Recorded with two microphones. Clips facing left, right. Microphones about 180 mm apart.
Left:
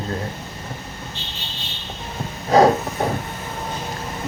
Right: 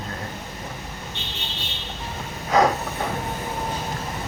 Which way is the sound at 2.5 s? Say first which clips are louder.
Left 5 dB; 35° left (ahead or behind).